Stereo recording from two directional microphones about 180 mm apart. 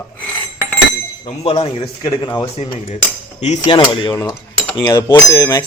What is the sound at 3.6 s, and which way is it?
Speech, 25° left (ahead or behind).